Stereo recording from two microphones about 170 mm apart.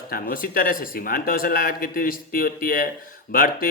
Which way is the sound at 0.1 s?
60° left (ahead or behind).